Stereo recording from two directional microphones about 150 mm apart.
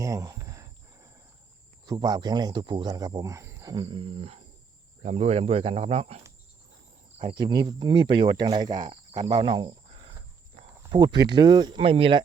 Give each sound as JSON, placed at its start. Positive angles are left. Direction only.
{"t": 0.0, "sound": "cricket", "side_deg": -20}
{"t": 1.9, "sound": "speech", "side_deg": -25}